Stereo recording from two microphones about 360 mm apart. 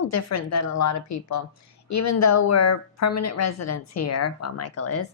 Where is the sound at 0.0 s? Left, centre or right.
Left.